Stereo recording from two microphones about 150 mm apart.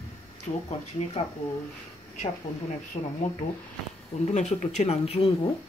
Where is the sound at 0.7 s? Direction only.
45° left (ahead or behind).